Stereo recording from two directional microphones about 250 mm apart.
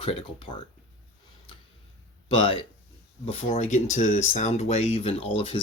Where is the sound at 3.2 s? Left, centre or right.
Left.